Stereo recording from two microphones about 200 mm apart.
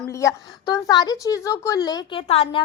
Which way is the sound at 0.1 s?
15° left (ahead or behind).